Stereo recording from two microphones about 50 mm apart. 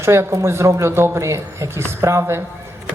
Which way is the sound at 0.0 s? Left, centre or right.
Right.